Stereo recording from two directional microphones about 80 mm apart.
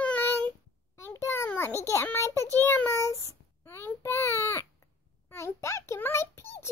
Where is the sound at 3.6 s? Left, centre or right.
Left.